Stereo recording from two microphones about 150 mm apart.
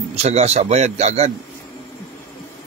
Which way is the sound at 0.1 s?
45° right (ahead or behind).